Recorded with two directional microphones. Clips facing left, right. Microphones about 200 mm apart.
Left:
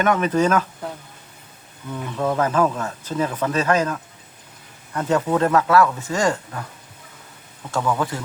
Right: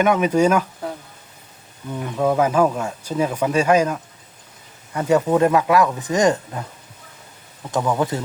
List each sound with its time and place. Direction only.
0.0 s speech: 10° right (ahead or behind)
1.9 s speech: 15° right (ahead or behind)
7.7 s speech: 15° right (ahead or behind)